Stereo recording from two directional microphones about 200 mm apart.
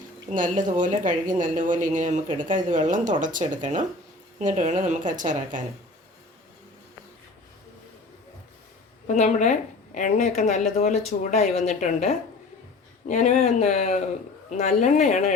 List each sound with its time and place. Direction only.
0.3 s a woman's voice: 40° right (ahead or behind)
9.1 s a woman's voice: 35° left (ahead or behind)